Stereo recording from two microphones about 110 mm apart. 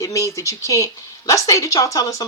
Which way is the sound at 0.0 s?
30° left (ahead or behind).